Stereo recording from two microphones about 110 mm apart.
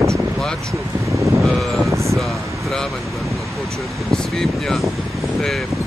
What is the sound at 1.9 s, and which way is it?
Speech, 25° right (ahead or behind).